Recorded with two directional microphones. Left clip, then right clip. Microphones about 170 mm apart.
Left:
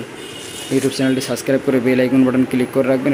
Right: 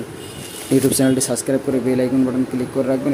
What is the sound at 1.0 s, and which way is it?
Speech, 20° right (ahead or behind).